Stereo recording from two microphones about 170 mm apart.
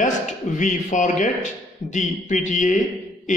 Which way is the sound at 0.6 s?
50° left (ahead or behind).